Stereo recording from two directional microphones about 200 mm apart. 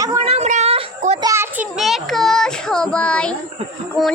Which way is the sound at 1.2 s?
15° right (ahead or behind).